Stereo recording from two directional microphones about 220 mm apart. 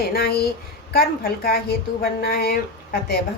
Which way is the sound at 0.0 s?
45° left (ahead or behind).